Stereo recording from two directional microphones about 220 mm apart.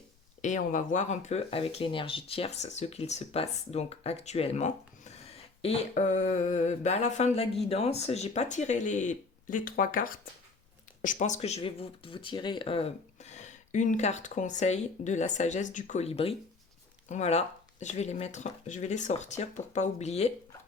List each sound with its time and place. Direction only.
0.4 s speech: 35° left (ahead or behind)